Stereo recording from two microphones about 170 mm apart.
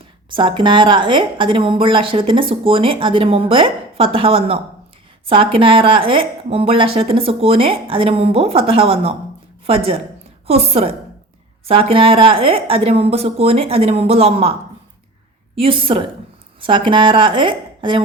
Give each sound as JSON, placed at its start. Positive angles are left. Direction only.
{"t": 0.3, "sound": "a woman's voice", "side_deg": -30}
{"t": 15.5, "sound": "a woman's voice", "side_deg": -30}